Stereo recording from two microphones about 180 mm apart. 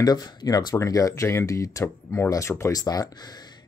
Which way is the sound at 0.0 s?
20° left (ahead or behind).